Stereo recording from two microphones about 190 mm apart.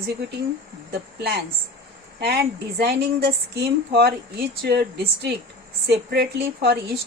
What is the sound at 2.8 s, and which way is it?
Speech, 60° right (ahead or behind).